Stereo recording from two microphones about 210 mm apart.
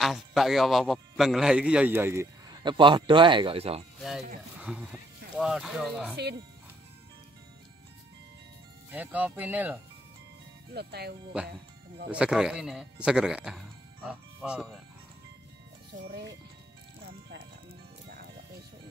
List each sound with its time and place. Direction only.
0.0 s a man's voice: centre (ahead or behind)
2.7 s speech: 25° right (ahead or behind)
4.6 s music: 5° right (ahead or behind)
5.4 s speech: centre (ahead or behind)
8.9 s speech: 5° right (ahead or behind)
10.7 s speech: 50° right (ahead or behind)
12.1 s speech: 5° right (ahead or behind)